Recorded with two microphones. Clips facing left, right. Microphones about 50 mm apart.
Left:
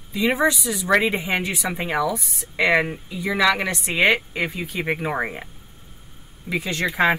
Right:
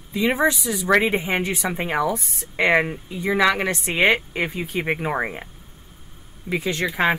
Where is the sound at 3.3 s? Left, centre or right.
Centre.